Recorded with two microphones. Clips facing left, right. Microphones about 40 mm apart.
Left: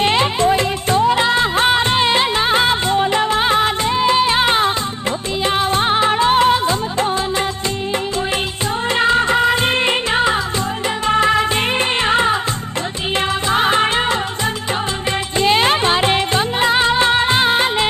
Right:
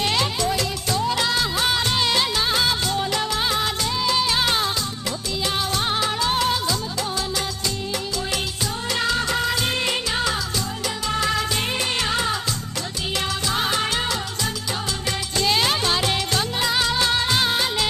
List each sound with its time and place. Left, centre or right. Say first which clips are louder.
0.0 s music: left 7 dB; left
8.9 s music of bollywood: left 8 dB; left
13.5 s music of bollywood: left 9 dB; left
15.3 s music: left 7 dB; left